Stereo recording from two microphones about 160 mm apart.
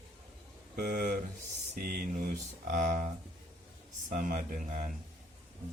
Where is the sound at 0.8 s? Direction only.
55° right (ahead or behind).